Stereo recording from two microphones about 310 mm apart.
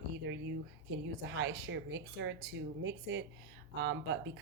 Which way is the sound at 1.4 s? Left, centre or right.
Right.